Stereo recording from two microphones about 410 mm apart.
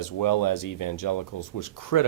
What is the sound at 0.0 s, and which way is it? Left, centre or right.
Speech, left.